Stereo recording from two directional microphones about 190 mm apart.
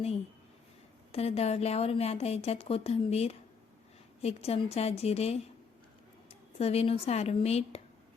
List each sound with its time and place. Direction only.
1.1 s speech: 35° left (ahead or behind)
6.6 s speech: 30° left (ahead or behind)